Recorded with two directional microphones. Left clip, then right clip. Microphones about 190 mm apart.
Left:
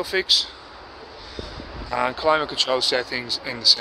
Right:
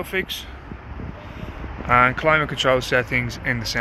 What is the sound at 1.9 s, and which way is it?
Speech, 15° left (ahead or behind).